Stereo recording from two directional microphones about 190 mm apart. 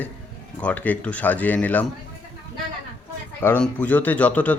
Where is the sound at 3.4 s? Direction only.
10° left (ahead or behind).